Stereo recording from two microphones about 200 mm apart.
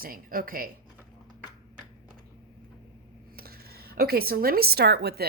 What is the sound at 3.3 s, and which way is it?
Speech, 50° right (ahead or behind).